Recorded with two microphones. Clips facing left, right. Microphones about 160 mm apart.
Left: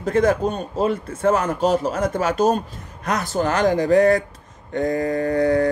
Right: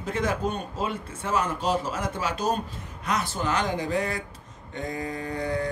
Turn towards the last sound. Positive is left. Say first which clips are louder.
# left 11 dB
turn(degrees=55)  # may be behind; listen again after turning